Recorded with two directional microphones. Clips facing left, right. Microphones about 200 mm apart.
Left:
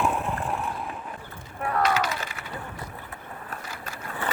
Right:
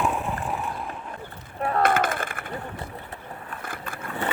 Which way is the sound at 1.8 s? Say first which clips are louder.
Right 3 dB; 55° right (ahead or behind).